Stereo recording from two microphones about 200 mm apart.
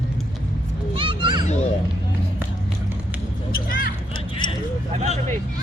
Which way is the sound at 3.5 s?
45° left (ahead or behind).